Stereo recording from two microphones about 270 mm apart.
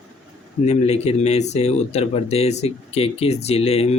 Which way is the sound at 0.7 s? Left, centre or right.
Left.